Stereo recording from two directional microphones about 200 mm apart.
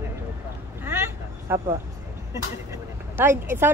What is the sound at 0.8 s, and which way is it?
Vehicle, 10° right (ahead or behind).